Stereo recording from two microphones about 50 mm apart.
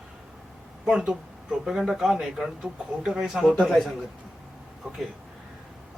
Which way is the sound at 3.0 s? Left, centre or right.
Centre.